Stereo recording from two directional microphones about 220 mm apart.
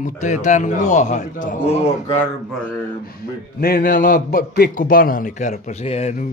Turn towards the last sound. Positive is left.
turn(degrees=30)  # may be behind; listen again after turning